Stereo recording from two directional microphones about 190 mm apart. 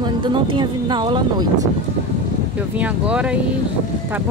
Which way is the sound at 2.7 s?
5° right (ahead or behind).